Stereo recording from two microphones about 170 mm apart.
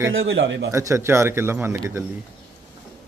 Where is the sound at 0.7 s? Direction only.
15° right (ahead or behind).